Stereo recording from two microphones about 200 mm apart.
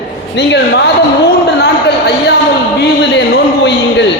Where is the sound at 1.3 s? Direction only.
55° left (ahead or behind).